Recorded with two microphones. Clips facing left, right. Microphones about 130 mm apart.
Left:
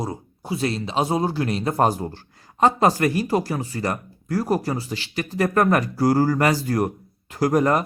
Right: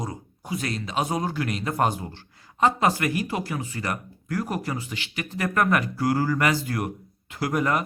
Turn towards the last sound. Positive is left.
turn(degrees=40)  # may be behind; listen again after turning